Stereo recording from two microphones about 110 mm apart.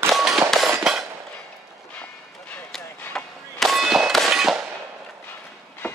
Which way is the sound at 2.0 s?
15° left (ahead or behind).